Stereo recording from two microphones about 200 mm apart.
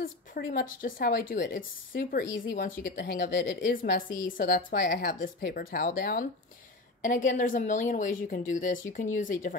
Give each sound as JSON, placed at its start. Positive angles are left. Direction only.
{"t": 0.0, "sound": "a woman's voice", "side_deg": 45}